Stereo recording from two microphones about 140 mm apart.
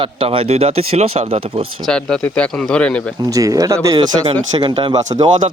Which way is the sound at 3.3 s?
25° right (ahead or behind).